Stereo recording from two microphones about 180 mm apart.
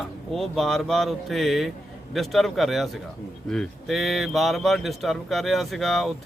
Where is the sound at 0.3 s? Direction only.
Centre (ahead or behind).